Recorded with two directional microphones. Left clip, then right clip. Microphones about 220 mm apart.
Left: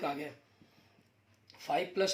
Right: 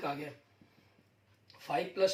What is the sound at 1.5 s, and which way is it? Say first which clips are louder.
Speech: left 1 dB; 45° left (ahead or behind).